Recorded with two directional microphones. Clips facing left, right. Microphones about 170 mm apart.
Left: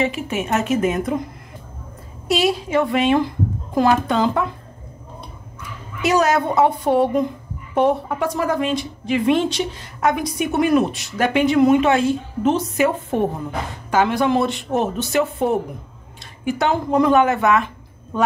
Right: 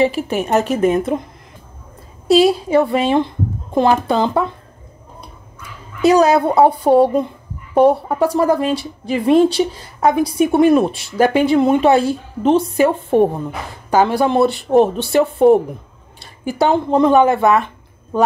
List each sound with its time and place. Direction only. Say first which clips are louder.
0.0 s speech: right 5 dB; 35° right (ahead or behind)
2.2 s a woman's voice: right 7 dB; 35° right (ahead or behind)
6.0 s speech: right 6 dB; 35° right (ahead or behind)